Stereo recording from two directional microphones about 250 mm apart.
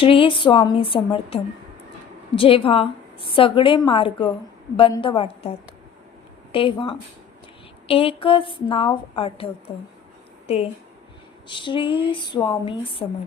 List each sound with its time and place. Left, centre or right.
0.0 s a woman's voice: left